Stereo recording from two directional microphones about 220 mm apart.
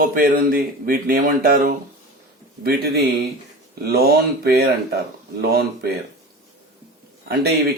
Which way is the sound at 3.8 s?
45° right (ahead or behind).